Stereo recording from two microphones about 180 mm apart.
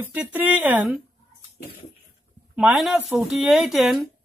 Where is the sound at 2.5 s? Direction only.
5° right (ahead or behind).